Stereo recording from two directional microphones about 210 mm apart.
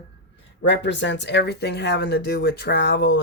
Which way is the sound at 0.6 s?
55° left (ahead or behind).